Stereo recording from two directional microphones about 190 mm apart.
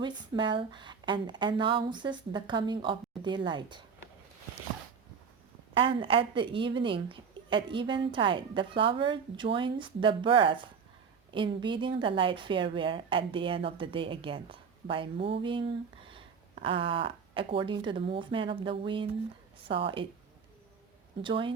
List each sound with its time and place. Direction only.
0.0 s a woman's voice: 25° right (ahead or behind)
5.7 s a woman's voice: 30° right (ahead or behind)
21.2 s a woman's voice: 25° right (ahead or behind)